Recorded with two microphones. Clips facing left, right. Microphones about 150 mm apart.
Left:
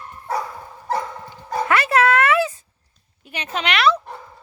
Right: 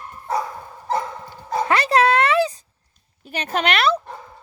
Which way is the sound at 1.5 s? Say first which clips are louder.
Right 1 dB; 35° right (ahead or behind).